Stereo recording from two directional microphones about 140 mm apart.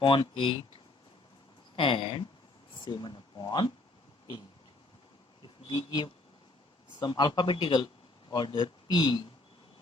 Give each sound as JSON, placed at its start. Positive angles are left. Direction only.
{"t": 0.0, "sound": "speech", "side_deg": 40}
{"t": 1.7, "sound": "speech", "side_deg": 40}
{"t": 5.6, "sound": "speech", "side_deg": 30}